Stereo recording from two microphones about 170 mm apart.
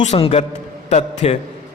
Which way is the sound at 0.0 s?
40° left (ahead or behind).